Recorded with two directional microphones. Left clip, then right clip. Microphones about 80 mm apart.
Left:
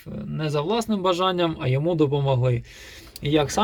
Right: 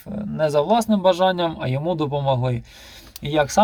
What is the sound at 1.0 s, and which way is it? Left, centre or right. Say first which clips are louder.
Speech: right 3 dB; right.